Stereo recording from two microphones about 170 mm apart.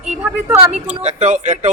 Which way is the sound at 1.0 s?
45° right (ahead or behind).